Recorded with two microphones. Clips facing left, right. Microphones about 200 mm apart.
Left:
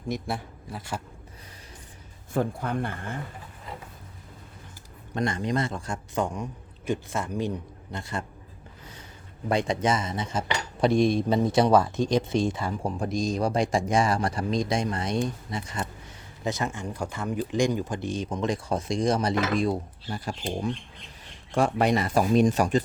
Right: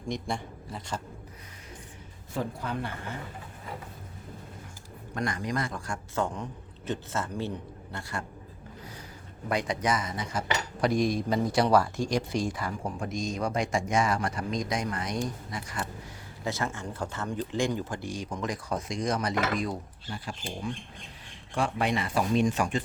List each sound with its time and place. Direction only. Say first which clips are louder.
0.1 s speech: left 2 dB; 5° left (ahead or behind)
2.3 s a man's voice: left 5 dB; 50° left (ahead or behind)
5.1 s speech: left 4 dB; 25° left (ahead or behind)
9.5 s speech: left 4 dB; 25° left (ahead or behind)